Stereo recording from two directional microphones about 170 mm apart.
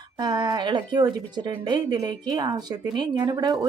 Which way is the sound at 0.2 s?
25° right (ahead or behind).